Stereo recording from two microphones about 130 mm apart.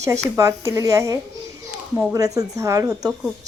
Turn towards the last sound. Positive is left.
turn(degrees=-25)  # may be behind; listen again after turning